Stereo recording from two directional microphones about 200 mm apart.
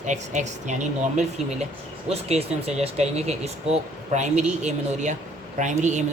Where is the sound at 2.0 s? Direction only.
30° right (ahead or behind).